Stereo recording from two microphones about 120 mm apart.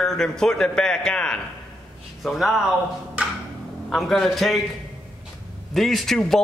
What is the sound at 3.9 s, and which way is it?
Speech, centre (ahead or behind).